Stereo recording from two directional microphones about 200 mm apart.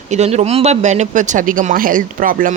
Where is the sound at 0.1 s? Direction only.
35° right (ahead or behind).